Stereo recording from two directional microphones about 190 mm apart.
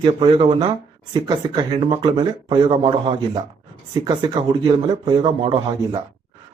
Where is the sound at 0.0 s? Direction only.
25° right (ahead or behind).